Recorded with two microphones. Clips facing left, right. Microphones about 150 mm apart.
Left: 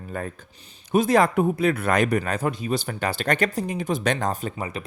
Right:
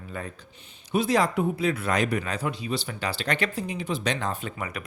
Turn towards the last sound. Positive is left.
turn(degrees=30)  # may be behind; listen again after turning